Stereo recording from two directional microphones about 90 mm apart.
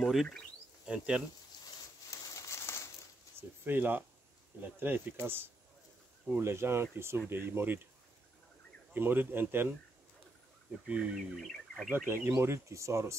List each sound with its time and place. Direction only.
0.8 s speech: 10° right (ahead or behind)
2.0 s crumpling: 40° left (ahead or behind)
3.3 s speech: 20° right (ahead or behind)
8.9 s speech: 20° right (ahead or behind)
10.9 s speech: 10° right (ahead or behind)
11.3 s speech: centre (ahead or behind)
11.9 s speech: 25° right (ahead or behind)